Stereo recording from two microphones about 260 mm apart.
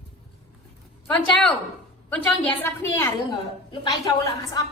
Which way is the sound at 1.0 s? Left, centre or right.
Centre.